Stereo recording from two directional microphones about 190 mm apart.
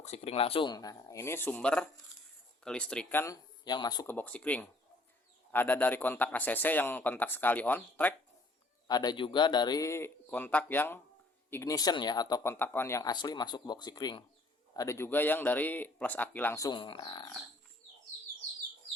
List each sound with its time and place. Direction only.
0.0 s speech: 35° left (ahead or behind); by 3.3 s 10° left (ahead or behind)
3.6 s speech: 20° left (ahead or behind)
4.0 s speech: 10° left (ahead or behind)
8.9 s speech: 20° left (ahead or behind)